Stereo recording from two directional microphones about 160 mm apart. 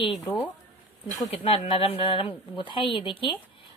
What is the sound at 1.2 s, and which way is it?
A woman's voice, 40° left (ahead or behind).